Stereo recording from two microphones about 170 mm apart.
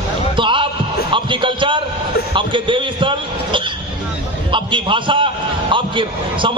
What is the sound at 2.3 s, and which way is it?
A man's voice, 30° right (ahead or behind).